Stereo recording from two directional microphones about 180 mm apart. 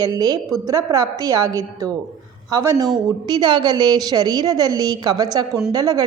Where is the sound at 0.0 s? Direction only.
20° right (ahead or behind).